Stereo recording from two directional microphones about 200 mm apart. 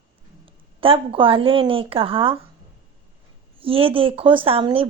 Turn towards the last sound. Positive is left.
turn(degrees=-25)  # may be behind; listen again after turning